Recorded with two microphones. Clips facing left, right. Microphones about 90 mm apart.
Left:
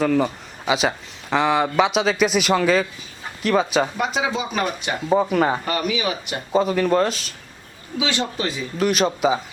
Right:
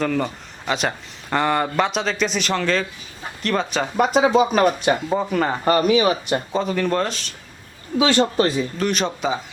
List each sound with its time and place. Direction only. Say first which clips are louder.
0.0 s speech: left 3 dB; 5° left (ahead or behind)
3.9 s speech: right 7 dB; 45° right (ahead or behind)
5.0 s speech: left 3 dB; 10° left (ahead or behind)
5.6 s speech: right 7 dB; 40° right (ahead or behind)
6.5 s speech: left 6 dB; 5° left (ahead or behind)
7.9 s speech: right 7 dB; 45° right (ahead or behind)
8.8 s speech: left 6 dB; 5° left (ahead or behind)